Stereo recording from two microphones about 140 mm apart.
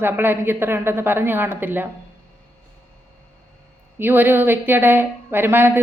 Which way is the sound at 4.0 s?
15° right (ahead or behind).